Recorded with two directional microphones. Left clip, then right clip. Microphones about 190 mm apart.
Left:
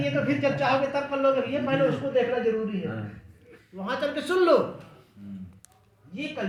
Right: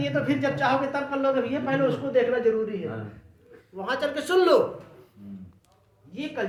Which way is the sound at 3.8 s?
25° right (ahead or behind).